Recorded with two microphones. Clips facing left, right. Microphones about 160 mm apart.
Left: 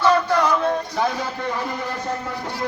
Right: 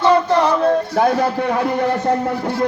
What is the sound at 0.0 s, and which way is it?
Music, 30° right (ahead or behind).